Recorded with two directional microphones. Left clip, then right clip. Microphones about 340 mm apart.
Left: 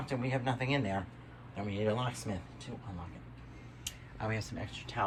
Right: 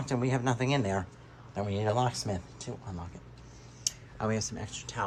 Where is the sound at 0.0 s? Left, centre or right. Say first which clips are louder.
Right 4 dB; centre.